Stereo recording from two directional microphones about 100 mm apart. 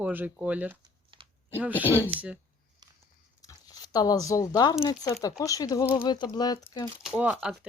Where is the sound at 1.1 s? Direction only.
60° right (ahead or behind).